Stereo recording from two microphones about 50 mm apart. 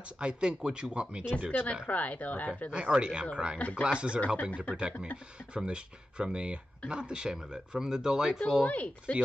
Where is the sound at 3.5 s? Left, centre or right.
Left.